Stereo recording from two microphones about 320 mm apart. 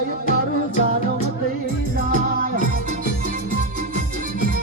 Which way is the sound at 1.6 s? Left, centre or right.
Right.